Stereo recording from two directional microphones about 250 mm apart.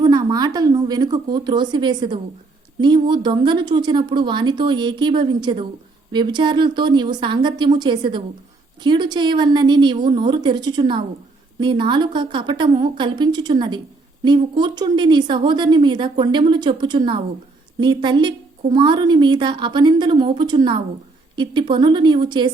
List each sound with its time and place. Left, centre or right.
0.0 s a woman's voice: centre